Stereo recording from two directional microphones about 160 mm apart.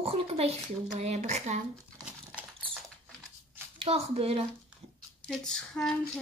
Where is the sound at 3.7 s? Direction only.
40° right (ahead or behind).